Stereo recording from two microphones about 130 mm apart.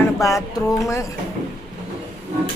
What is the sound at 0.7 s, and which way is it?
Speech, 25° left (ahead or behind).